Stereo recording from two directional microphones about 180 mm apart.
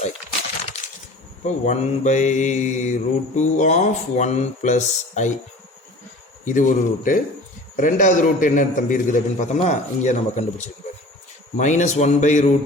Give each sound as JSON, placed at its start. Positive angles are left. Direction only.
{"t": 0.7, "sound": "a sound", "side_deg": 35}
{"t": 1.5, "sound": "speech", "side_deg": 40}
{"t": 6.4, "sound": "a man's voice", "side_deg": 45}